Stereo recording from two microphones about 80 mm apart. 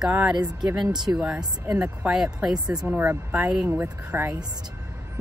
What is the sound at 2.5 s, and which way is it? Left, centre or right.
Speech, right.